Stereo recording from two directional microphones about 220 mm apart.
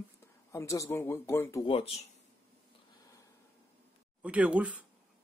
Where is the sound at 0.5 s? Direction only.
15° left (ahead or behind).